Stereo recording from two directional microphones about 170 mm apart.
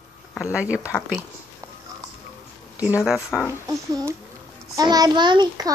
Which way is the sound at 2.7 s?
10° right (ahead or behind).